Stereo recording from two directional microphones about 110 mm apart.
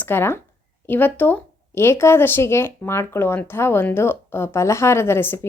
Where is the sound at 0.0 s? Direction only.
20° left (ahead or behind).